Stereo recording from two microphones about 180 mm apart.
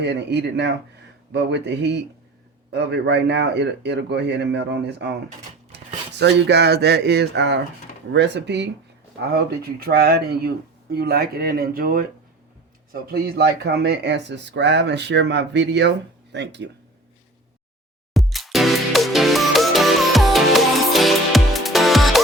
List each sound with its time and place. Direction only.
0.0 s speech: 70° right (ahead or behind)
18.1 s music: centre (ahead or behind)